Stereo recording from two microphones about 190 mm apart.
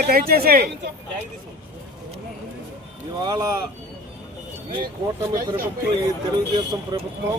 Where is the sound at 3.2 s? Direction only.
20° right (ahead or behind).